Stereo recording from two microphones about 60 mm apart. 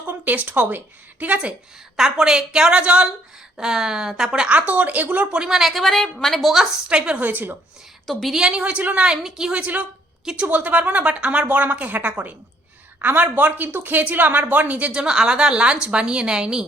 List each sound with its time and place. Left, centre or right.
0.0 s a woman's voice: right
2.0 s a woman's voice: centre
6.9 s a woman's voice: centre
7.2 s a woman's voice: right
8.0 s a woman's voice: centre
8.4 s a woman's voice: centre
15.0 s a woman's voice: centre